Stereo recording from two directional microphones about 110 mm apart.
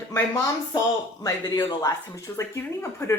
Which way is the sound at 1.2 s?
40° left (ahead or behind).